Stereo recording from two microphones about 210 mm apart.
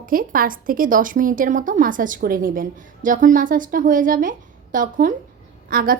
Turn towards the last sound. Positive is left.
turn(degrees=-45)  # may be behind; listen again after turning